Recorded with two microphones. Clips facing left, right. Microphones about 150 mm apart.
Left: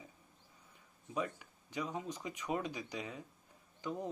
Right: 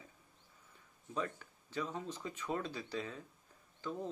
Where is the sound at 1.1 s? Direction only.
10° left (ahead or behind).